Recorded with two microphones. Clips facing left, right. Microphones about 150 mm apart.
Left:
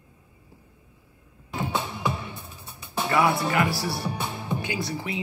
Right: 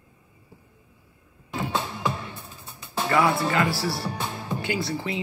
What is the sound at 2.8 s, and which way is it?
Speech, 15° left (ahead or behind).